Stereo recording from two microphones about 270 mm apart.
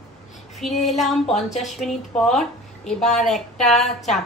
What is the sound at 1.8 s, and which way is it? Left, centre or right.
A woman's voice, centre.